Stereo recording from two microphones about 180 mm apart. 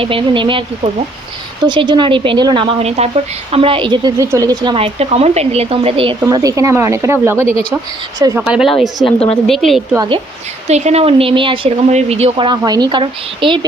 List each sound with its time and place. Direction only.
0.0 s a woman's voice: 30° right (ahead or behind)
6.2 s speech: 20° right (ahead or behind)
8.4 s speech: centre (ahead or behind)
9.9 s speech: 20° right (ahead or behind)
10.7 s speech: 40° right (ahead or behind)